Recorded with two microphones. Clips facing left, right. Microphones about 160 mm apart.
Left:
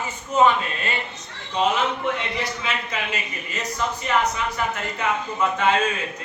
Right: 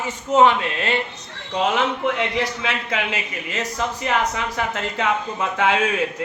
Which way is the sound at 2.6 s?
90° right.